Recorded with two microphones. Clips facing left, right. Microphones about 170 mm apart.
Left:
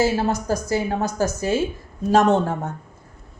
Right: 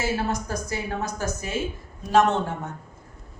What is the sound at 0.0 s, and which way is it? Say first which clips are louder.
A woman's voice: left 6 dB; 35° left (ahead or behind).